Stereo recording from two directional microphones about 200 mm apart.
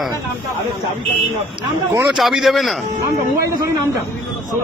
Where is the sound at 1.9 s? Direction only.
5° right (ahead or behind).